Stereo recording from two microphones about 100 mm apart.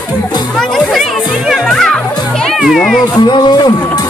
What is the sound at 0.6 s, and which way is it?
Music, centre (ahead or behind).